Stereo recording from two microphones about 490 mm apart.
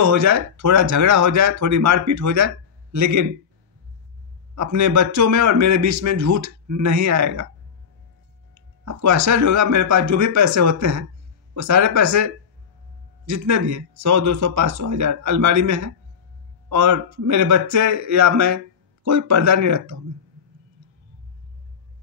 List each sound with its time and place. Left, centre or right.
0.0 s speech: right
4.6 s speech: right
8.5 s speech: right